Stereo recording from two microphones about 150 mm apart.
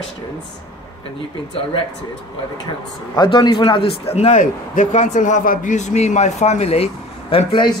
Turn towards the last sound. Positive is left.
turn(degrees=35)  # may be behind; listen again after turning